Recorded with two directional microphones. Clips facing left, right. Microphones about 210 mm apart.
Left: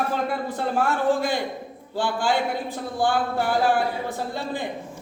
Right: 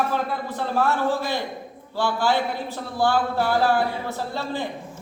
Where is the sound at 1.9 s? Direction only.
15° left (ahead or behind).